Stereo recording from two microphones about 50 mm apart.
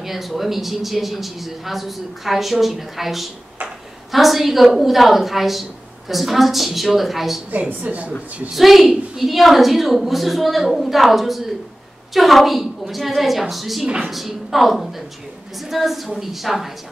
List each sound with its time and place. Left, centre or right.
0.0 s a man's voice: centre
7.8 s speech: right
8.5 s a man's voice: centre